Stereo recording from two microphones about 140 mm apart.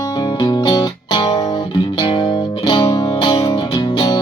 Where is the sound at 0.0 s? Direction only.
30° left (ahead or behind).